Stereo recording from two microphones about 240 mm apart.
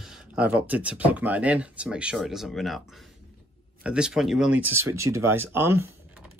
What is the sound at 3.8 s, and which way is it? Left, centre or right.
Speech, centre.